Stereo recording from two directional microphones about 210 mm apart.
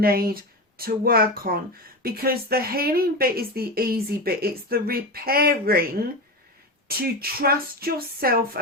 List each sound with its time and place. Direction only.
0.0 s speech: 45° right (ahead or behind)